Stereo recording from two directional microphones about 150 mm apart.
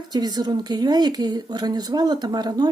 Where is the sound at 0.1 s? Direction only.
25° right (ahead or behind).